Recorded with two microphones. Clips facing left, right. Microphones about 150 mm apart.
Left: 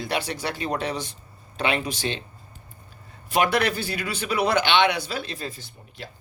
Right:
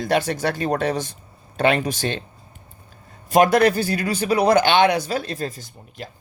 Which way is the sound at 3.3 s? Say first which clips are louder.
Right 7 dB; 45° right (ahead or behind).